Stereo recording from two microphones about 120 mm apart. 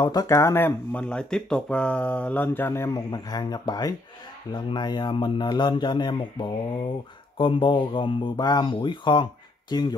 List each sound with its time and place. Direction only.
0.0 s speech: 35° left (ahead or behind)
3.1 s speech: 35° left (ahead or behind)